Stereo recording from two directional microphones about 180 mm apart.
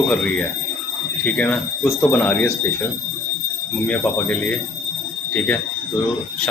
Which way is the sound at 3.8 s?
10° left (ahead or behind).